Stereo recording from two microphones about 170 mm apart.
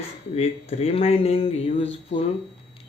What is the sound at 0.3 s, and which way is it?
Speech, 35° left (ahead or behind).